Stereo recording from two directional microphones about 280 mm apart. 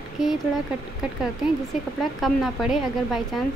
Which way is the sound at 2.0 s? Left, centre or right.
Centre.